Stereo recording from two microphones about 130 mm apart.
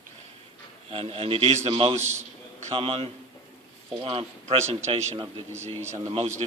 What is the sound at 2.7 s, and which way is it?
A man's voice, 45° right (ahead or behind).